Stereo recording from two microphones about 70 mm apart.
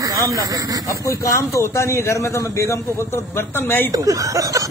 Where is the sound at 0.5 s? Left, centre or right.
Right.